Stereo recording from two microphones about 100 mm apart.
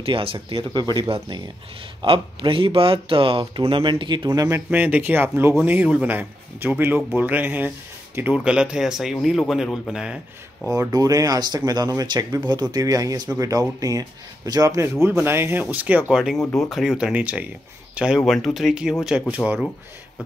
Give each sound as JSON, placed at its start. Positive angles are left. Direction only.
{"t": 0.0, "sound": "speech", "side_deg": -65}
{"t": 2.0, "sound": "speech", "side_deg": -60}
{"t": 4.3, "sound": "speech", "side_deg": -30}
{"t": 4.6, "sound": "a man's voice", "side_deg": -15}
{"t": 10.9, "sound": "speech", "side_deg": -35}
{"t": 16.5, "sound": "speech", "side_deg": 0}